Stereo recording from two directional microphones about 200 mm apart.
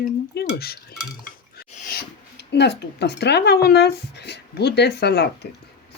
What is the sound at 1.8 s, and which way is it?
Speech, 50° left (ahead or behind).